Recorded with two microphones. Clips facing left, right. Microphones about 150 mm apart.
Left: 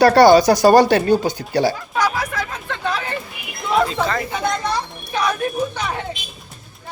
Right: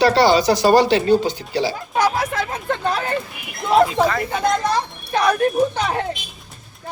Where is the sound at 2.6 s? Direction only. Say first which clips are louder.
Right 4 dB; 40° right (ahead or behind).